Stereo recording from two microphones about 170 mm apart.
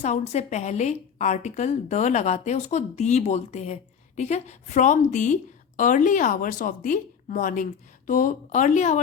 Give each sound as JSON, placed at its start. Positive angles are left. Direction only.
{"t": 0.0, "sound": "a woman's voice", "side_deg": 40}